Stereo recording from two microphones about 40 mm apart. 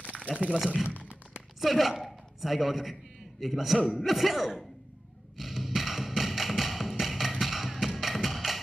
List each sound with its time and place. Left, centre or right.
0.1 s a sound: left
1.6 s a man's voice: centre
5.4 s music: centre